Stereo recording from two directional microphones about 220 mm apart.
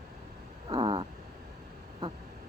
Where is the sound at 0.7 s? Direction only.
25° right (ahead or behind).